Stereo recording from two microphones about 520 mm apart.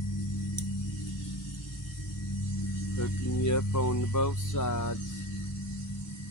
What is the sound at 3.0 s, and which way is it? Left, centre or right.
Music, left.